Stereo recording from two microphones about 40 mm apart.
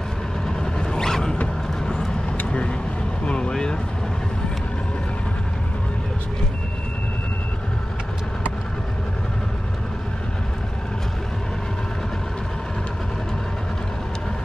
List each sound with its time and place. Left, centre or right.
0.7 s creak: centre
3.3 s vehicle: left